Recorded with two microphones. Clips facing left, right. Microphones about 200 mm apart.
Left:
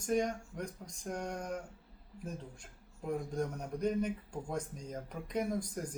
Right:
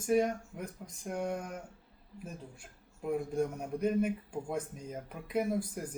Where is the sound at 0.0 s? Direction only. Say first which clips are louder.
Right 4 dB; 5° right (ahead or behind).